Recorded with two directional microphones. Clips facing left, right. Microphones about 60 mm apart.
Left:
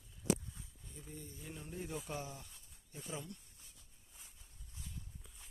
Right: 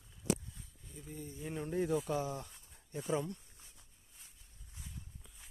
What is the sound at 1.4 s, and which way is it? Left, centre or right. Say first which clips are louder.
Speech: right 12 dB; right.